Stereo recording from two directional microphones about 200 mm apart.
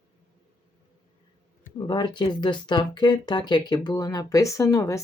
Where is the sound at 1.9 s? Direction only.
25° left (ahead or behind).